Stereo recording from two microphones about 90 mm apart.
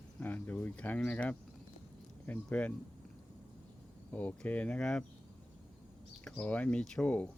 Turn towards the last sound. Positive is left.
turn(degrees=15)  # may be behind; listen again after turning